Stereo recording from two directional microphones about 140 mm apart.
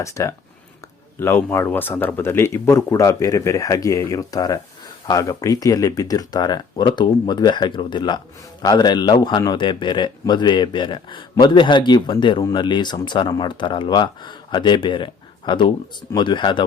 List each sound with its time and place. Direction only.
0.0 s a man's voice: 20° left (ahead or behind)